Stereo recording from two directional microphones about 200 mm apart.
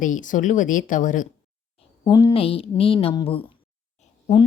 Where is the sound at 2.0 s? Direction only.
20° left (ahead or behind).